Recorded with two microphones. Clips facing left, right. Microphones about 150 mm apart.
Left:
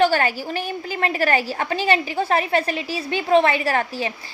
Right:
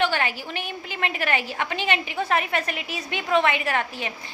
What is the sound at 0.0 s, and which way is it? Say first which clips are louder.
A woman's voice: left 6 dB; 40° left (ahead or behind).